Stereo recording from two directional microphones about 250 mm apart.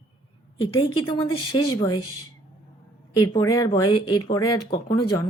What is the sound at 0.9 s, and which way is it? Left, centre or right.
A woman's voice, centre.